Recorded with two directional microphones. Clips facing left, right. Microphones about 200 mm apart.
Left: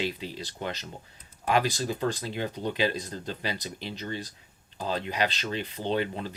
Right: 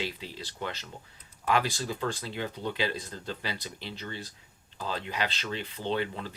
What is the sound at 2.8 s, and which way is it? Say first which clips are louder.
Speech: left 7 dB; 15° left (ahead or behind).